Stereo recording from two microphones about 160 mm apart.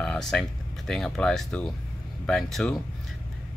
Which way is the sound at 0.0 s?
5° left (ahead or behind).